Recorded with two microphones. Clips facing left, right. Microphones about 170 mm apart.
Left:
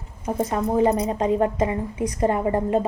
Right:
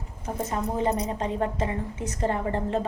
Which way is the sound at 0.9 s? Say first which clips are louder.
Left 7 dB; 15° left (ahead or behind).